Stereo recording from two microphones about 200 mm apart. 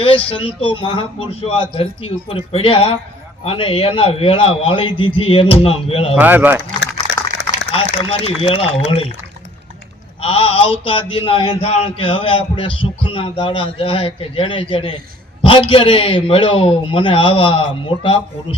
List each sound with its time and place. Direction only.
0.3 s a man's voice: 25° left (ahead or behind)
6.1 s speech: 10° right (ahead or behind)
7.7 s a man's voice: 30° left (ahead or behind)
10.2 s a man's voice: 30° left (ahead or behind)